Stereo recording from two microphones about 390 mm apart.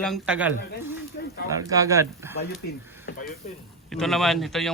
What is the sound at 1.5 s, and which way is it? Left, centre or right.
Speech, centre.